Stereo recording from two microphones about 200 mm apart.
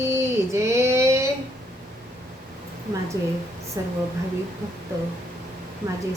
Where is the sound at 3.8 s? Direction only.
20° right (ahead or behind).